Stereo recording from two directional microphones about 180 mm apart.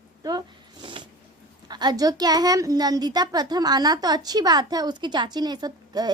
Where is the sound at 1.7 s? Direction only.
25° right (ahead or behind).